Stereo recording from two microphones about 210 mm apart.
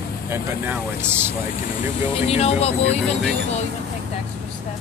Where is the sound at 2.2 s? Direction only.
30° left (ahead or behind).